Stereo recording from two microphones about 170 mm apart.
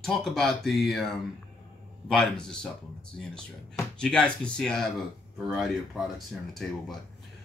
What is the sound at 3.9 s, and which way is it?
Speech, 5° left (ahead or behind).